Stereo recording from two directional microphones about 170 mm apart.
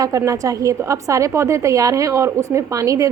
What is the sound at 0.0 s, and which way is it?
A woman's voice, 20° right (ahead or behind).